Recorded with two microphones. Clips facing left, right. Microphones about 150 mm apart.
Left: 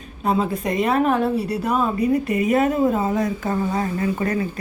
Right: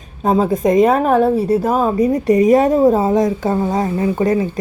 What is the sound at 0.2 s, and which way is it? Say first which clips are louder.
A woman's voice: right 6 dB; 45° right (ahead or behind).